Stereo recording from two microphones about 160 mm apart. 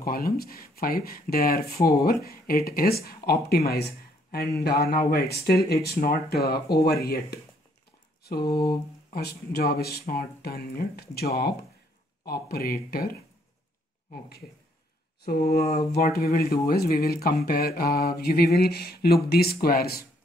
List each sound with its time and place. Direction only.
0.0 s speech: 70° left (ahead or behind)
8.2 s mantra: 75° left (ahead or behind)
9.1 s speech: 80° left
15.4 s speech: 75° left (ahead or behind)